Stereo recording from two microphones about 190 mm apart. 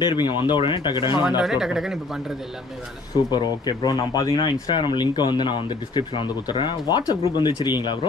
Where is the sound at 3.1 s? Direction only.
20° left (ahead or behind).